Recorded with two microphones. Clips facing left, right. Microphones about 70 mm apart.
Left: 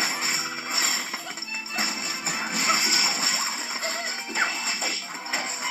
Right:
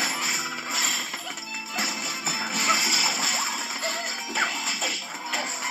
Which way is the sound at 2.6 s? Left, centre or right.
Centre.